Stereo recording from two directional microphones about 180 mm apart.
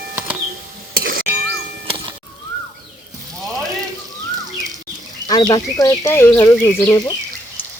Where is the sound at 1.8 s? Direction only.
30° right (ahead or behind).